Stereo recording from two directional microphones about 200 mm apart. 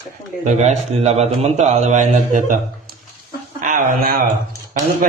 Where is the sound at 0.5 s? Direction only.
35° right (ahead or behind).